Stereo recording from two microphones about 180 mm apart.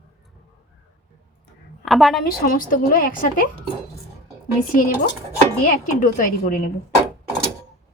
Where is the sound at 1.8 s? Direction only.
Centre (ahead or behind).